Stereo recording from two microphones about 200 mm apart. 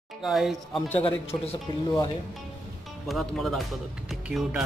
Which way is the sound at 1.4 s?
25° left (ahead or behind).